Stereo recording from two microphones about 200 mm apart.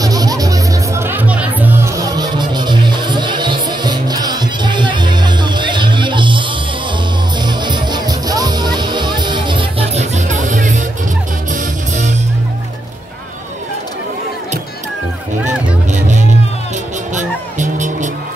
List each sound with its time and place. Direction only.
0.0 s music: 20° right (ahead or behind); by 10.8 s 40° right (ahead or behind)
17.1 s music: 40° right (ahead or behind)